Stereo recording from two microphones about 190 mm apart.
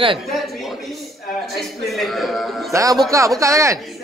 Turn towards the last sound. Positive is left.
turn(degrees=-15)  # may be behind; listen again after turning